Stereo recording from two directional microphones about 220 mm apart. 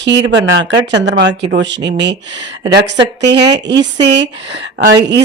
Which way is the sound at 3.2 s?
50° right (ahead or behind).